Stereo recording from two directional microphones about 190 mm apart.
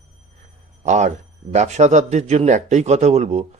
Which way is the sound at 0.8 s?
35° right (ahead or behind).